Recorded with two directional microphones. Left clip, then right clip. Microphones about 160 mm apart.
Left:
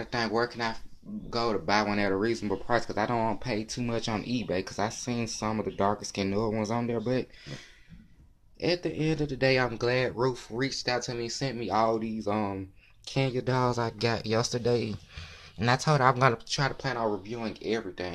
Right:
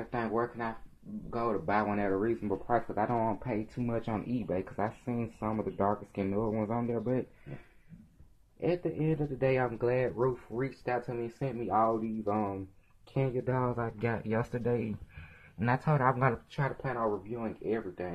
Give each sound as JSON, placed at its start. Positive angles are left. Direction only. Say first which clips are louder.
{"t": 0.1, "sound": "speech", "louder": "left 4 dB", "side_deg": 30}
{"t": 8.5, "sound": "speech", "louder": "left 3 dB", "side_deg": 30}